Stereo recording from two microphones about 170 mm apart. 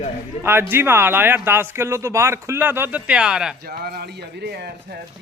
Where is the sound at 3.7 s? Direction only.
65° right (ahead or behind).